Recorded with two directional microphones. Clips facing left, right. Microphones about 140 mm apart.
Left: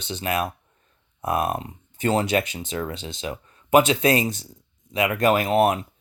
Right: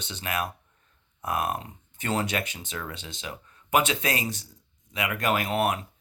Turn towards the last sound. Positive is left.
turn(degrees=30)  # may be behind; listen again after turning